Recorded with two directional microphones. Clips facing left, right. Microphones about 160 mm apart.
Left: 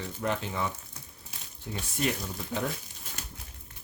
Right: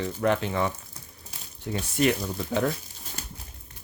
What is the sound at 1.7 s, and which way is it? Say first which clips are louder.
Speech: right 7 dB; 75° right (ahead or behind).